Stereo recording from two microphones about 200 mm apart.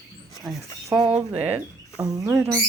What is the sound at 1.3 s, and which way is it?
Speech, 10° right (ahead or behind).